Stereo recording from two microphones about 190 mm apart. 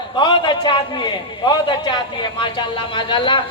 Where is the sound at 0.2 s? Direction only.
25° left (ahead or behind).